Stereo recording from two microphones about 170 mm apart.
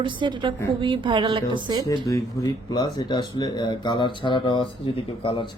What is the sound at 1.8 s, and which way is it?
Speech, 20° left (ahead or behind).